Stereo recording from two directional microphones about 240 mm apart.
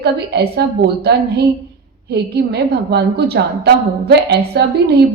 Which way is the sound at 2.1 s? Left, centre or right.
Right.